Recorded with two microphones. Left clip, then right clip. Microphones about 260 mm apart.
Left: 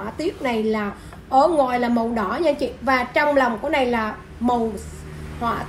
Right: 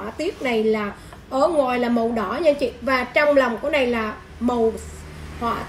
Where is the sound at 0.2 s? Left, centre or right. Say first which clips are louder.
Right 2 dB; centre.